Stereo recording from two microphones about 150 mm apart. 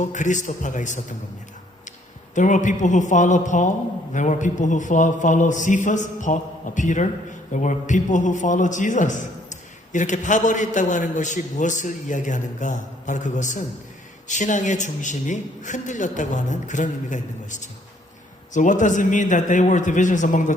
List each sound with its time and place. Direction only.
0.0 s a man's voice: 55° left (ahead or behind)
2.3 s a man's voice: 55° left (ahead or behind)